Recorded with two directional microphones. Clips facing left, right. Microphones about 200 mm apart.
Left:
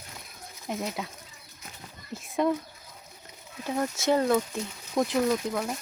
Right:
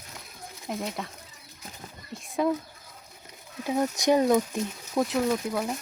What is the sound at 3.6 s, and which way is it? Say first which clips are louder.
Speech: right 3 dB; 15° right (ahead or behind).